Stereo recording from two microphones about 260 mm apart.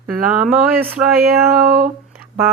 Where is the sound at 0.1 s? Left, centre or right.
Centre.